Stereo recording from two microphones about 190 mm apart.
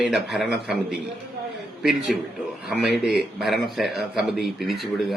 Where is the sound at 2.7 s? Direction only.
5° right (ahead or behind).